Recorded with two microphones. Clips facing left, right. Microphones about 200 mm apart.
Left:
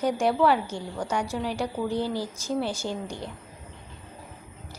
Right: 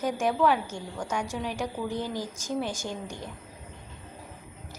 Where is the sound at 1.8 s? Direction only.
35° left (ahead or behind).